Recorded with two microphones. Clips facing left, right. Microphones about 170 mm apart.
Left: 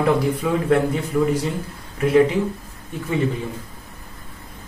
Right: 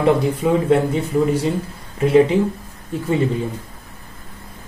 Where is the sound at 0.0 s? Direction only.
25° right (ahead or behind).